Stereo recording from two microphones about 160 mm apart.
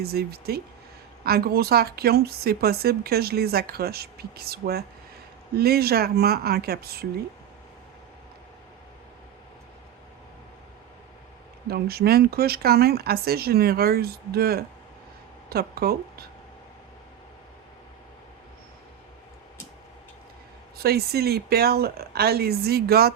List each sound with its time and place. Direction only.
0.0 s speech: 80° right
11.7 s speech: 75° right (ahead or behind)
20.7 s speech: 80° right